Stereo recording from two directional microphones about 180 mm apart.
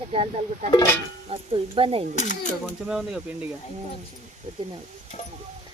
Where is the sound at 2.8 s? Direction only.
5° right (ahead or behind).